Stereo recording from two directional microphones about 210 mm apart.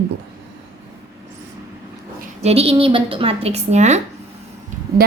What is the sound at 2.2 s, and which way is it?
A woman's voice, 30° right (ahead or behind).